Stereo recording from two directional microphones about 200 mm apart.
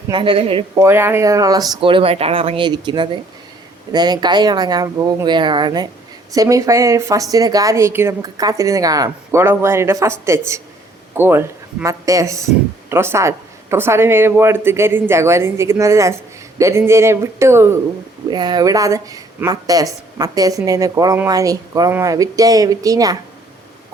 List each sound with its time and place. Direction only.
0.1 s speech: 25° right (ahead or behind)
0.8 s speech: 10° right (ahead or behind)